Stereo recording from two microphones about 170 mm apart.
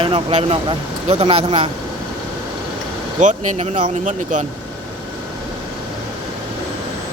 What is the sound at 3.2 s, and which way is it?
Speech, 45° right (ahead or behind).